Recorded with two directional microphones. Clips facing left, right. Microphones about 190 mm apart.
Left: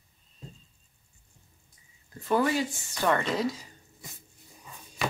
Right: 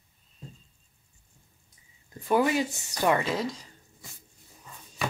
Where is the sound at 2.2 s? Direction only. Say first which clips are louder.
Right 1 dB; 15° right (ahead or behind).